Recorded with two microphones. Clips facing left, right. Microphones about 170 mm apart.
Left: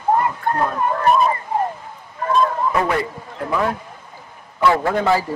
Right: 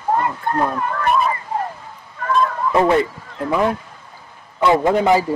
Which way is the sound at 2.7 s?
25° right (ahead or behind).